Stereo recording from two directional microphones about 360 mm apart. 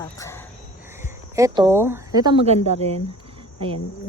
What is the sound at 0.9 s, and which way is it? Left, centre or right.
Speech, centre.